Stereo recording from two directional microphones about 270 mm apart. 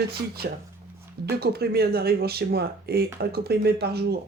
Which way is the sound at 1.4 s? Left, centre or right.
Right.